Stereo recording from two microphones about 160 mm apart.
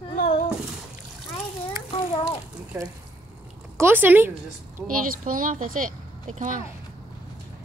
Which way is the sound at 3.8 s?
10° right (ahead or behind).